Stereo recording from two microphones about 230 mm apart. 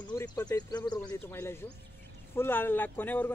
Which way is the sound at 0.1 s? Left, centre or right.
Centre.